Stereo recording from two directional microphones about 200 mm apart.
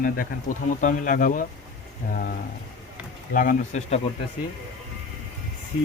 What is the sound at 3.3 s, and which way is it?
Speech, 45° left (ahead or behind).